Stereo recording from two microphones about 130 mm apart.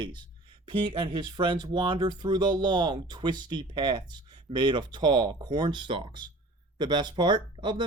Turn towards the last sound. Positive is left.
turn(degrees=-35)  # may be behind; listen again after turning